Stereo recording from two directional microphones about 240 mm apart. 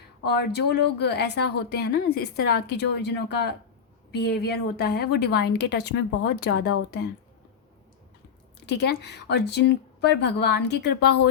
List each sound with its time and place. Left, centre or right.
0.2 s a woman's voice: left
8.6 s a woman's voice: left